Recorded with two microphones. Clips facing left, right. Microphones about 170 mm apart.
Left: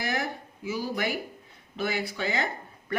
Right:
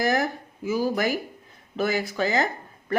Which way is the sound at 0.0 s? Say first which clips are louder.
Right 7 dB; 45° right (ahead or behind).